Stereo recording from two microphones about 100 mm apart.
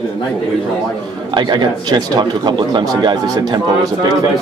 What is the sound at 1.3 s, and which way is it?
Speech, 50° right (ahead or behind).